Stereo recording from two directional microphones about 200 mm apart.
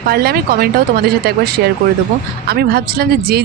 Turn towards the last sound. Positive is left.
turn(degrees=-50)  # may be behind; listen again after turning